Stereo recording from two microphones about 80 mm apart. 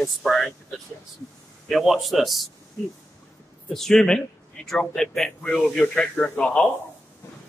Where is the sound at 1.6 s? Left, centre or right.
Centre.